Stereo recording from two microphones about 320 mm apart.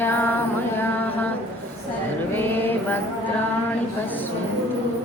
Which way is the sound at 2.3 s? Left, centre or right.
Centre.